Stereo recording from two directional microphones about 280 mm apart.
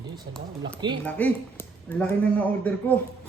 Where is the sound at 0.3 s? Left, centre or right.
Right.